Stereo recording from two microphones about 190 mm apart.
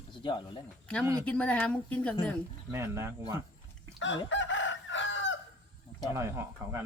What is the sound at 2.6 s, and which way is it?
Speech, 15° right (ahead or behind).